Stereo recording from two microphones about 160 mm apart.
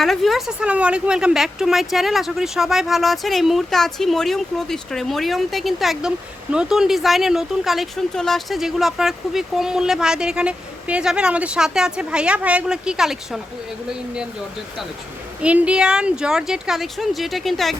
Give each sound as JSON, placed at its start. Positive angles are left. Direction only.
{"t": 0.0, "sound": "speech", "side_deg": 0}
{"t": 15.4, "sound": "speech", "side_deg": -10}